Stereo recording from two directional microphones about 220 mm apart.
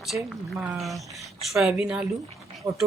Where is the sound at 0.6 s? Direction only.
Centre (ahead or behind).